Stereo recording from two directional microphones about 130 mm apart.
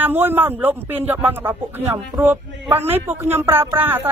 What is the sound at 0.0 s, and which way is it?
Speech, 15° right (ahead or behind).